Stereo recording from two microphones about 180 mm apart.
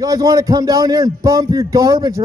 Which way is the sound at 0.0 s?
20° right (ahead or behind).